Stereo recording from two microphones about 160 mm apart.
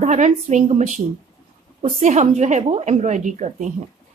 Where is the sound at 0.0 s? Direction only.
45° right (ahead or behind).